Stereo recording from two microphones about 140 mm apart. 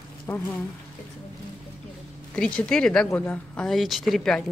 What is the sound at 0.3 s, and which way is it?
Speech, 15° left (ahead or behind).